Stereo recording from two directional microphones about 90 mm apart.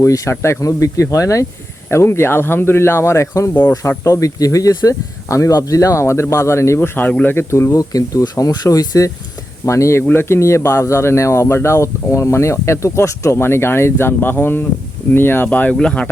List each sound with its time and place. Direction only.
0.0 s speech: 35° left (ahead or behind); by 16.0 s 10° left (ahead or behind)